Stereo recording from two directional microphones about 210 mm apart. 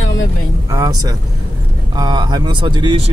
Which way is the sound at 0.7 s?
15° right (ahead or behind).